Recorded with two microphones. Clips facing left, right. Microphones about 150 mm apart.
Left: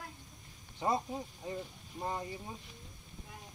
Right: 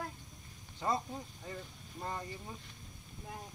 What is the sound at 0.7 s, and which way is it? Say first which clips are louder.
Speech: left 2 dB; 20° left (ahead or behind).